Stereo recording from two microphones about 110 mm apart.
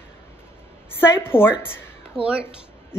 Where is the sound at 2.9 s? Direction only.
20° left (ahead or behind).